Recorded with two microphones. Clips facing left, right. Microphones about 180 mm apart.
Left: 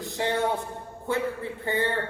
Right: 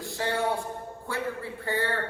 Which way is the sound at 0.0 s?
20° left (ahead or behind).